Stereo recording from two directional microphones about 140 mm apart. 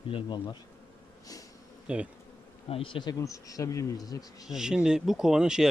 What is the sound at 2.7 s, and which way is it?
Speech, 40° left (ahead or behind).